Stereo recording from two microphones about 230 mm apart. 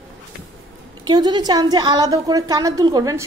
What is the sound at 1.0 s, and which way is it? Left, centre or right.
A woman's voice, centre.